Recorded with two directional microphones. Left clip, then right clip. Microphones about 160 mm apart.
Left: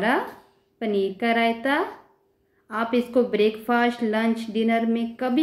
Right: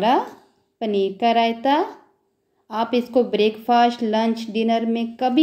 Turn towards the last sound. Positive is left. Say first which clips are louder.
# right 4 dB
turn(degrees=-25)  # may be behind; listen again after turning